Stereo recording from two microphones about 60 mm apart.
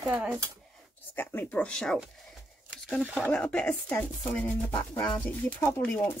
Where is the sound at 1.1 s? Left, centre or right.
Left.